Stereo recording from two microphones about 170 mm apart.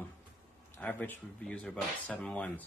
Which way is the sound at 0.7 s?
10° left (ahead or behind).